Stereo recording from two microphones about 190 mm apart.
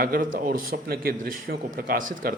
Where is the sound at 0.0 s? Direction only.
50° right (ahead or behind).